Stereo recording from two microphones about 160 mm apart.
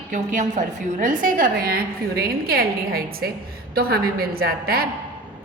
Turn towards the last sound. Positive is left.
turn(degrees=-70)  # may be behind; listen again after turning